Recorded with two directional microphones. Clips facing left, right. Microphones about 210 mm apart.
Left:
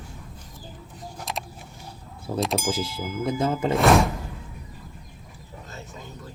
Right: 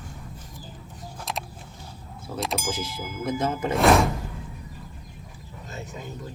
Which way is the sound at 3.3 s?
30° left (ahead or behind).